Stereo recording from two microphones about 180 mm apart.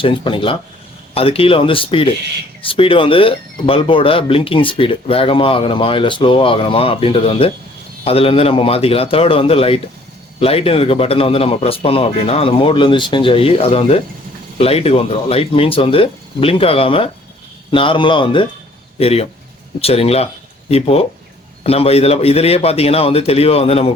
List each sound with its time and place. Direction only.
0.0 s speech: 30° left (ahead or behind)